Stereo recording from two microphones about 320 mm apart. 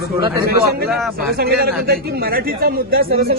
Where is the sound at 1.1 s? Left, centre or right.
Right.